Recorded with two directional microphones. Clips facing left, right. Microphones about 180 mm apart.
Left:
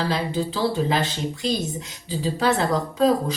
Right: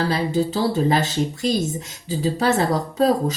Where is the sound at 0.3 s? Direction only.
45° right (ahead or behind).